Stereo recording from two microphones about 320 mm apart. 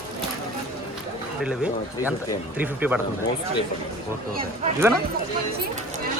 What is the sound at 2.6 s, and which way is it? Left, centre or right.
Church bell, centre.